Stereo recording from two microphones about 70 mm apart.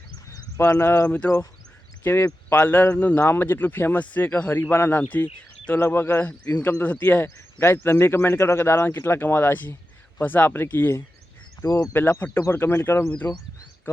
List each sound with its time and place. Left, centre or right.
0.5 s speech: left
1.0 s speech: centre
2.5 s speech: left
3.2 s speech: left
5.7 s speech: left
6.1 s speech: left
11.6 s speech: left
11.9 s speech: left